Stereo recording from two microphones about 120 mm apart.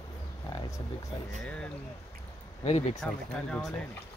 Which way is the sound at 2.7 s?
60° left (ahead or behind).